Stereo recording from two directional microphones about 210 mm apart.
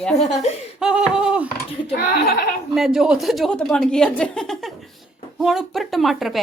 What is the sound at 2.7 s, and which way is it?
Speech, centre (ahead or behind).